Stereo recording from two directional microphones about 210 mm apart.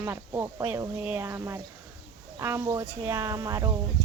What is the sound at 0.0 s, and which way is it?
Speech, 15° right (ahead or behind).